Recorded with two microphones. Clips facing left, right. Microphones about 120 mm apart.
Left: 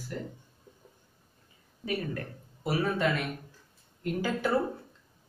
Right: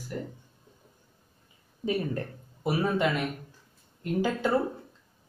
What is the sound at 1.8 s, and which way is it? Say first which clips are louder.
Speech: right 4 dB; 25° right (ahead or behind).